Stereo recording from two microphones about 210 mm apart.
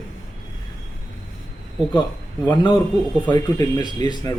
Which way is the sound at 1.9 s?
20° left (ahead or behind).